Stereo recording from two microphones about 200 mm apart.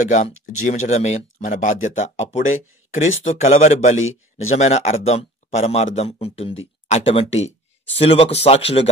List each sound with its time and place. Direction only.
0.0 s speech: 35° left (ahead or behind)
3.9 s speech: 85° left
4.6 s speech: 35° left (ahead or behind)